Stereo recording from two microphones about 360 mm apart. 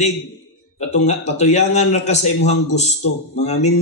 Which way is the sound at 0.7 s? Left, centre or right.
Centre.